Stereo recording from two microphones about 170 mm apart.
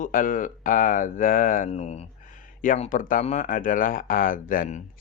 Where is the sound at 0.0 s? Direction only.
55° left (ahead or behind).